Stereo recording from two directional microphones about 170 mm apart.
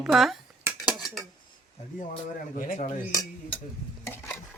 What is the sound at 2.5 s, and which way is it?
Speech, 50° left (ahead or behind).